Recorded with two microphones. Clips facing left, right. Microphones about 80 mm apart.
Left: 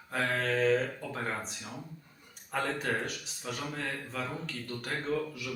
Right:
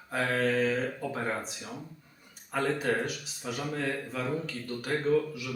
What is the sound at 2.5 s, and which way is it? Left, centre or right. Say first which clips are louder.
Speech: right 3 dB; centre.